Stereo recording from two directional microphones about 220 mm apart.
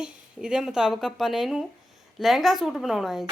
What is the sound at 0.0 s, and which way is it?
A woman's voice, 5° right (ahead or behind).